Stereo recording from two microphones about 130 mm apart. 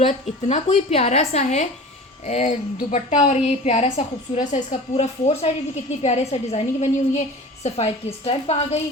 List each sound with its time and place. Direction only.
0.1 s a woman's voice: 60° left (ahead or behind)